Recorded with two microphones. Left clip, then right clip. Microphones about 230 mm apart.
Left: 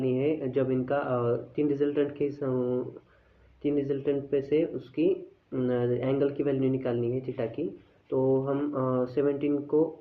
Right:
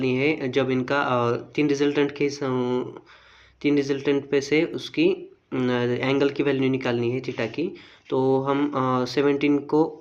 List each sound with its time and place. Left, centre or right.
0.0 s speech: right